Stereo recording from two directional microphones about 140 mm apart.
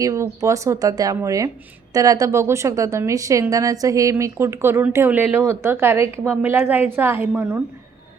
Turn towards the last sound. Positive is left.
turn(degrees=-15)  # may be behind; listen again after turning